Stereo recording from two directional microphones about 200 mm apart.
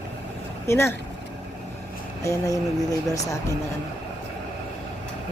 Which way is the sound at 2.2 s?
15° left (ahead or behind).